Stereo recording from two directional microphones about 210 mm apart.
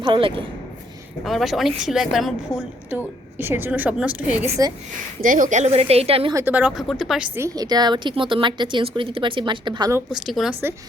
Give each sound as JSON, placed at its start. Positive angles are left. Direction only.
{"t": 0.0, "sound": "a woman's voice", "side_deg": -25}
{"t": 1.2, "sound": "speech", "side_deg": 0}
{"t": 3.3, "sound": "speech", "side_deg": -10}
{"t": 5.2, "sound": "a woman's voice", "side_deg": -40}
{"t": 6.3, "sound": "speech", "side_deg": -10}
{"t": 7.3, "sound": "a woman's voice", "side_deg": -15}
{"t": 10.1, "sound": "speech", "side_deg": 0}